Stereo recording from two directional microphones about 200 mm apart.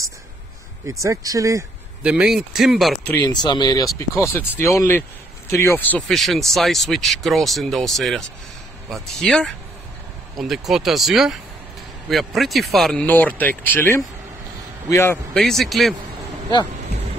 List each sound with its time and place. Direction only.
0.8 s speech: 15° right (ahead or behind)
3.3 s speech: 20° left (ahead or behind); by 15.9 s centre (ahead or behind)